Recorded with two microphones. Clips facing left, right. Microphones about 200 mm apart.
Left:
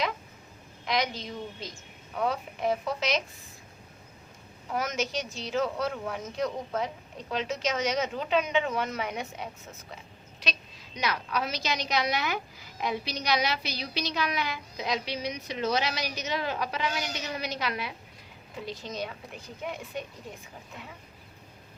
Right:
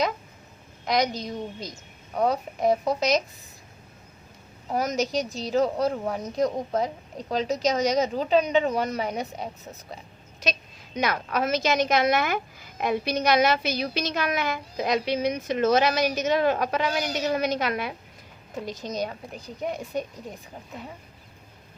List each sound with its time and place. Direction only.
0.9 s speech: 40° right (ahead or behind)
4.7 s speech: 40° right (ahead or behind)
10.4 s a woman's voice: 50° right (ahead or behind)